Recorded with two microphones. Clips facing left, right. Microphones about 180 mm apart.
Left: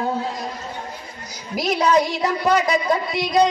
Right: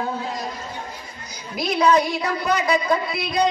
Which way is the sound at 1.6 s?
40° left (ahead or behind).